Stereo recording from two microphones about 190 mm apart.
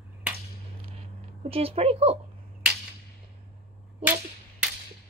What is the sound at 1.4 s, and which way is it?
Speech, 30° right (ahead or behind).